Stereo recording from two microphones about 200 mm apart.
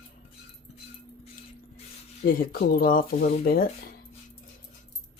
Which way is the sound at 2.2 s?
45° left (ahead or behind).